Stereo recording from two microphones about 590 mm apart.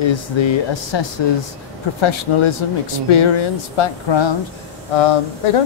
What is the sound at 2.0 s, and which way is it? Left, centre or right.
Speech, left.